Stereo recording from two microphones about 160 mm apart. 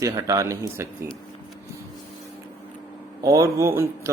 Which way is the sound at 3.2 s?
20° right (ahead or behind).